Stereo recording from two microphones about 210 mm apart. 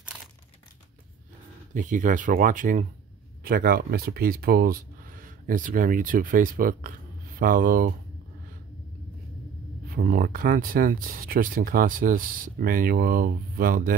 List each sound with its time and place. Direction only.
1.7 s speech: 40° right (ahead or behind)
9.8 s speech: 45° right (ahead or behind)